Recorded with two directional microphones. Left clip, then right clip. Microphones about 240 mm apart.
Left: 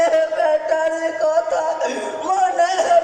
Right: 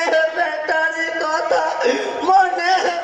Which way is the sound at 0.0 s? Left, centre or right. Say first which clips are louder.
Left 1 dB; right.